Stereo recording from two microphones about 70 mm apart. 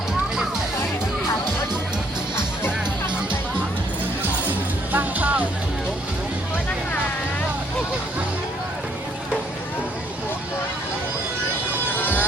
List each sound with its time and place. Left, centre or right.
4.2 s music: right
11.9 s music: left